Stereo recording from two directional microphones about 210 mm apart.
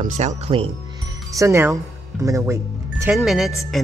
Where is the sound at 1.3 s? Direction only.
15° right (ahead or behind).